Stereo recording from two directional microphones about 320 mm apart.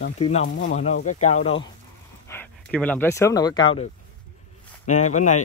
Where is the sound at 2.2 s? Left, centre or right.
Centre.